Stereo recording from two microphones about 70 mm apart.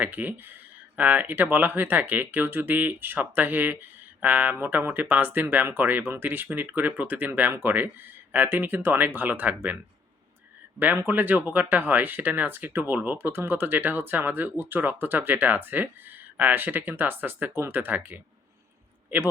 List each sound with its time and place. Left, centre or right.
0.0 s speech: right
10.8 s speech: right